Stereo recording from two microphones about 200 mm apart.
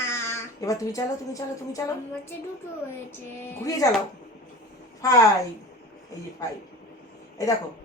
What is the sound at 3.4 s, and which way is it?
Speech, 15° left (ahead or behind).